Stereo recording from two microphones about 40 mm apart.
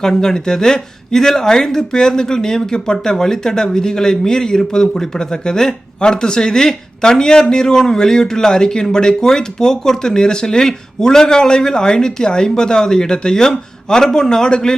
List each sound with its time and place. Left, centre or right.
0.0 s speech: centre